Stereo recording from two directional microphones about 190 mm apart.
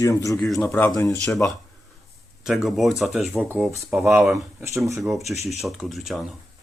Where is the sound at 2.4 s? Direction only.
Centre (ahead or behind).